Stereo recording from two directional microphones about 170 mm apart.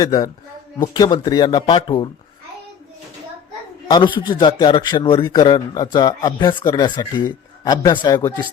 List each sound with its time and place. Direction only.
0.0 s a man's voice: 25° left (ahead or behind)
3.8 s a man's voice: 25° left (ahead or behind)